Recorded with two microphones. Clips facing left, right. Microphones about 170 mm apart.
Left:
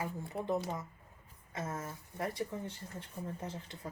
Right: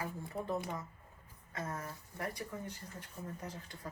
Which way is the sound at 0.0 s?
20° left (ahead or behind).